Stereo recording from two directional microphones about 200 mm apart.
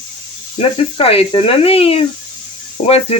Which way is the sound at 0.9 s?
30° left (ahead or behind).